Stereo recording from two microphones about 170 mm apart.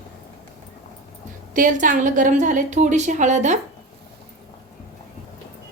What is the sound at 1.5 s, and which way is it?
A woman's voice, 50° right (ahead or behind).